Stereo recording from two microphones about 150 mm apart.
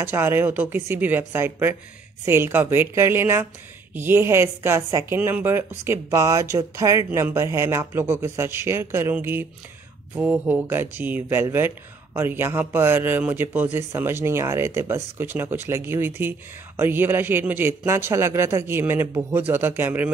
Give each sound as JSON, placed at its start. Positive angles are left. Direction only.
{"t": 0.0, "sound": "speech", "side_deg": -15}